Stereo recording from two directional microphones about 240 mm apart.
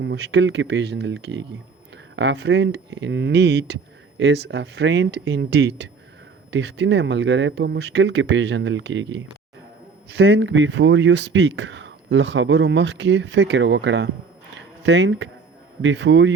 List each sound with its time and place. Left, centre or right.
0.0 s speech: right
14.5 s a sound: right
15.8 s speech: right